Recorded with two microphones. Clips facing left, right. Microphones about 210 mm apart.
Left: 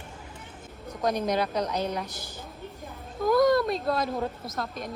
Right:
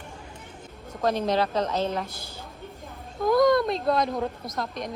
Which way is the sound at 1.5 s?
25° right (ahead or behind).